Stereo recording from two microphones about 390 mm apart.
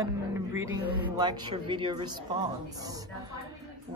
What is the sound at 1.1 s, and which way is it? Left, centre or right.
Speech, centre.